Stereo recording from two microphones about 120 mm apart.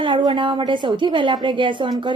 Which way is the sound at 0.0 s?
40° right (ahead or behind).